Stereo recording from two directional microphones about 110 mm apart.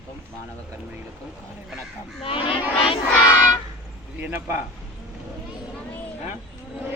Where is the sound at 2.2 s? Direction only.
55° left (ahead or behind).